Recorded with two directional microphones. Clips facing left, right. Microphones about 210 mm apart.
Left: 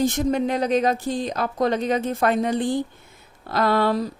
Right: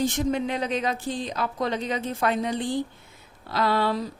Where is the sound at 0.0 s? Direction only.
45° left (ahead or behind).